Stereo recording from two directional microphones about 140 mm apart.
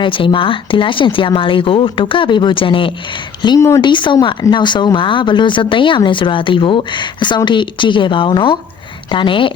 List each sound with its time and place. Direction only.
0.0 s speech: 35° left (ahead or behind)